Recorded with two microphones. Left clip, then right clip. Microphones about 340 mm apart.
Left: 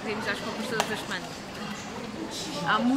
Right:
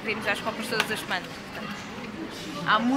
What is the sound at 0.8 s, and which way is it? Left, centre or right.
Speech, left.